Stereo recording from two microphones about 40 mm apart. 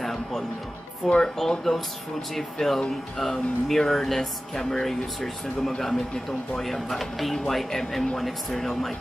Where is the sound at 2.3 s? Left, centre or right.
Centre.